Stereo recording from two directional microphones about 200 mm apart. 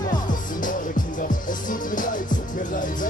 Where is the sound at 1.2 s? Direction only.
40° left (ahead or behind).